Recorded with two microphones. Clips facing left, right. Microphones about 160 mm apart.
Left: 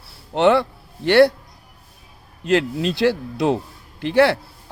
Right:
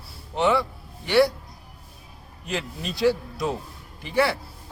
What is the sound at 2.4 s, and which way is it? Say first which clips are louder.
Speech: left 12 dB; 75° left (ahead or behind).